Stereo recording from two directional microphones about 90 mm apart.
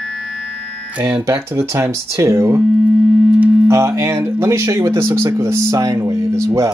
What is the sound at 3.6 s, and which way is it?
Speech, 35° right (ahead or behind).